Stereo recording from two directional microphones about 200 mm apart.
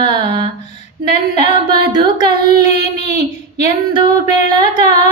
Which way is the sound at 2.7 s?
35° left (ahead or behind).